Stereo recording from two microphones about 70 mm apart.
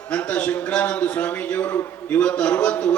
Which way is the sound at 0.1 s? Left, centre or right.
Left.